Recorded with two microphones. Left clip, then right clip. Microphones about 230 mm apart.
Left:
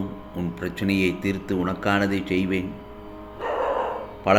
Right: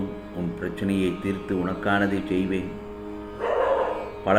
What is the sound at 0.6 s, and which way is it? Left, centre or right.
A man's voice, left.